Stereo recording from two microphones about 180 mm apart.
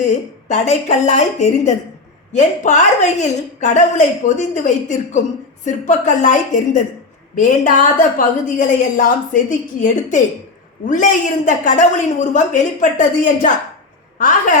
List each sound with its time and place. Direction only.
0.0 s a woman's voice: 40° left (ahead or behind)